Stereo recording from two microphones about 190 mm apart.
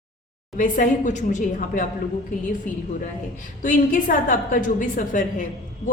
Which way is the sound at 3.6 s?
45° left (ahead or behind).